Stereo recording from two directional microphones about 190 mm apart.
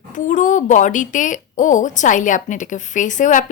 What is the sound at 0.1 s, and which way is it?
A woman's voice, 40° left (ahead or behind).